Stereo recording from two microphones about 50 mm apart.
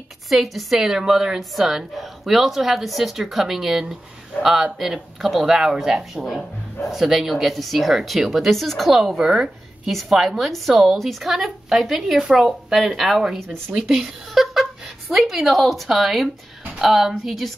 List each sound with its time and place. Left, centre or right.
0.3 s a woman's voice: centre
6.2 s speech: centre
6.9 s a woman's voice: centre
9.2 s a woman's voice: centre
13.2 s speech: centre
13.8 s a woman's voice: centre